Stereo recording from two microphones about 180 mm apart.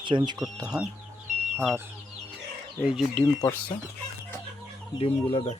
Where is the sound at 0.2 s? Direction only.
20° right (ahead or behind).